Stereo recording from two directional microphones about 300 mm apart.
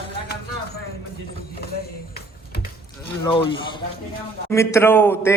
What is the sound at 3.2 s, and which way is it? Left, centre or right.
A man's voice, centre.